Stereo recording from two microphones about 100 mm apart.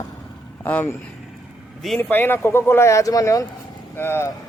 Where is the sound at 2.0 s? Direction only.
20° left (ahead or behind); by 3.4 s 35° left (ahead or behind).